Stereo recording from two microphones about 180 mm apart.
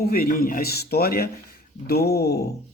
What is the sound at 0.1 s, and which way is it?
Speech, 55° left (ahead or behind).